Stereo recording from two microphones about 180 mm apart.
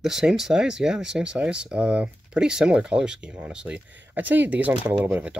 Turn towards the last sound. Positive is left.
turn(degrees=-5)  # may be behind; listen again after turning